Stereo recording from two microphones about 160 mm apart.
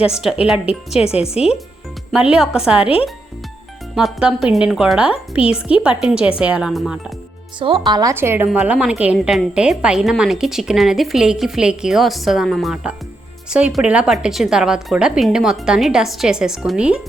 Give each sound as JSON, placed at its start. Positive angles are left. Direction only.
{"t": 0.1, "sound": "a woman's voice", "side_deg": -5}
{"t": 0.9, "sound": "speech", "side_deg": 40}
{"t": 2.1, "sound": "a woman's voice", "side_deg": -5}
{"t": 3.9, "sound": "a woman's voice", "side_deg": -5}
{"t": 7.6, "sound": "speech", "side_deg": -30}
{"t": 8.1, "sound": "a woman's voice", "side_deg": -15}